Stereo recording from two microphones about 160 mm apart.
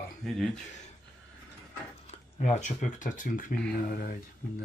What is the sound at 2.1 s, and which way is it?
Speech, 45° left (ahead or behind).